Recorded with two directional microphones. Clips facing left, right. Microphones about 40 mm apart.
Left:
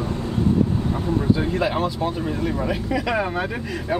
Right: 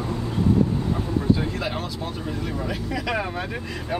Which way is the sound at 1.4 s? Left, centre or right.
Centre.